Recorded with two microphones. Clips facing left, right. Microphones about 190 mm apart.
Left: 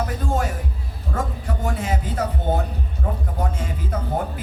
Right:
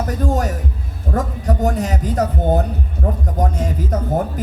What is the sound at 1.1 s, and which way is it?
Speech, 40° right (ahead or behind).